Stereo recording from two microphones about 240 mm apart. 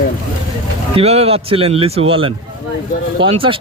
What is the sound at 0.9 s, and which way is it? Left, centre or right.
A man's voice, right.